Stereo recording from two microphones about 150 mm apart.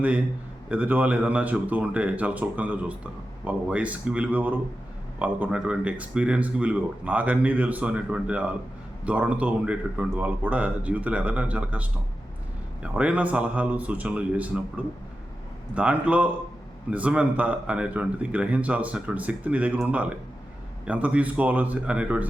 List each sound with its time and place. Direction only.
0.7 s speech: 10° right (ahead or behind)
15.7 s speech: 10° right (ahead or behind)